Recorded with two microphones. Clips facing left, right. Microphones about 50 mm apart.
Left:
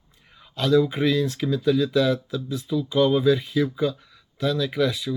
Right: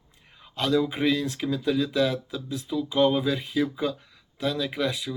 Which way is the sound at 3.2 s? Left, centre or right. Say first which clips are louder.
Left 5 dB; right.